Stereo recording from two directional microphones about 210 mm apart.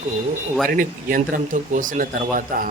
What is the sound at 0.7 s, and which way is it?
Speech, 40° right (ahead or behind).